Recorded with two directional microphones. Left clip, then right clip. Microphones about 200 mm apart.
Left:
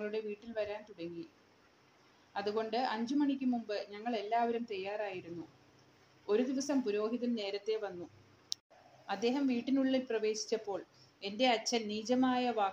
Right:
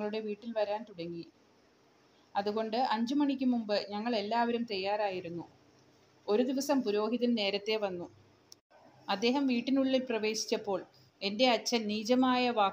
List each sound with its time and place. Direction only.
0.0 s speech: 40° right (ahead or behind)
2.3 s a woman's voice: 40° right (ahead or behind)
6.2 s speech: 40° right (ahead or behind)
9.0 s speech: 40° right (ahead or behind)